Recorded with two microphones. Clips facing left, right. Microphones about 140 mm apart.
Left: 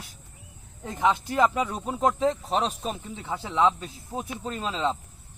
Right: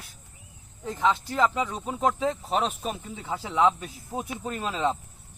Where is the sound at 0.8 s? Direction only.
15° left (ahead or behind).